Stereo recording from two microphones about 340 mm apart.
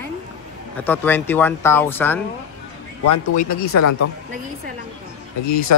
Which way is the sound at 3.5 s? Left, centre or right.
Left.